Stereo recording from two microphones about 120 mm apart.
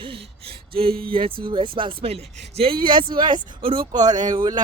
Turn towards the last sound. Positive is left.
turn(degrees=-35)  # may be behind; listen again after turning